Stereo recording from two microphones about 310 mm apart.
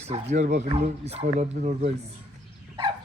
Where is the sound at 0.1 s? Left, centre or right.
Right.